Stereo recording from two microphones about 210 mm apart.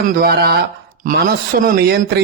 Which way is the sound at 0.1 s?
45° right (ahead or behind).